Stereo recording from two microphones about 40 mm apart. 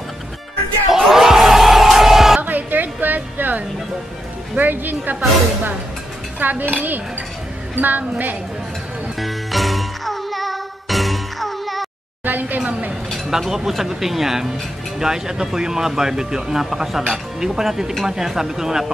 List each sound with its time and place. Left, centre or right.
0.8 s music: centre
2.4 s a sound: right
4.6 s a woman's voice: right
6.4 s a woman's voice: right
7.7 s a woman's voice: right
9.2 s music: centre
12.3 s a sound: right
13.3 s speech: centre